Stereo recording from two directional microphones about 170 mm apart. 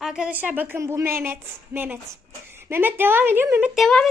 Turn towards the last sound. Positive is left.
turn(degrees=0)  # may be behind; listen again after turning